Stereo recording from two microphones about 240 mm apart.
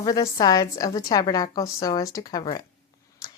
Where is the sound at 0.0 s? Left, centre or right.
Centre.